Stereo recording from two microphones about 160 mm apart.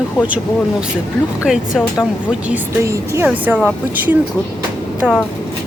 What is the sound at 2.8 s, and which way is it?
Speech, 15° right (ahead or behind).